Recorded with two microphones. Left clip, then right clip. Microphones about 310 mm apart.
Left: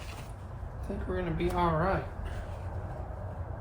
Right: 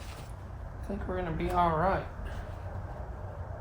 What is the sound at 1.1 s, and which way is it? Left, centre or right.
Speech, centre.